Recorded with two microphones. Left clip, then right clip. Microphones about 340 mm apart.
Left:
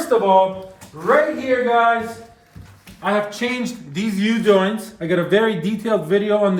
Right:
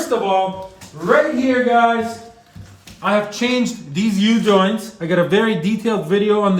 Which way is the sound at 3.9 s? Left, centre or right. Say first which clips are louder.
Right 3 dB; centre.